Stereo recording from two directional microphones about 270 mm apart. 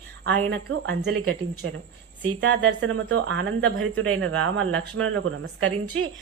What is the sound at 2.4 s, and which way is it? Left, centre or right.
A woman's voice, right.